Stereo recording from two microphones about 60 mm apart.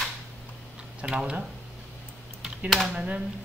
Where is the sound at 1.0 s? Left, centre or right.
Centre.